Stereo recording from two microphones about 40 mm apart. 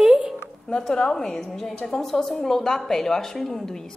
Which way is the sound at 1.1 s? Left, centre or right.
Centre.